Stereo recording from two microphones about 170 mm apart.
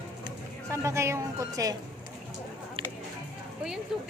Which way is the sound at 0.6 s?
15° right (ahead or behind).